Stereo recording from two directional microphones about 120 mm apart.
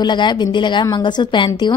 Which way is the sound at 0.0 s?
40° left (ahead or behind).